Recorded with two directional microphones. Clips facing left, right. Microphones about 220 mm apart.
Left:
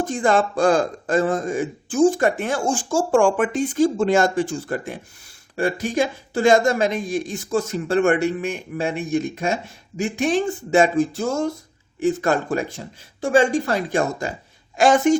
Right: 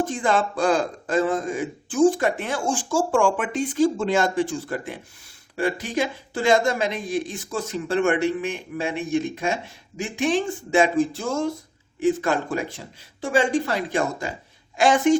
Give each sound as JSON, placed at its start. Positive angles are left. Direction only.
{"t": 0.1, "sound": "a man's voice", "side_deg": 45}